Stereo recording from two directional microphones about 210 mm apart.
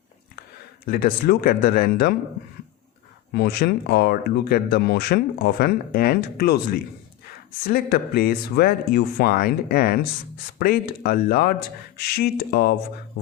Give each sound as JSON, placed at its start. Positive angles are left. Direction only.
{"t": 0.9, "sound": "speech", "side_deg": 45}
{"t": 3.3, "sound": "speech", "side_deg": 50}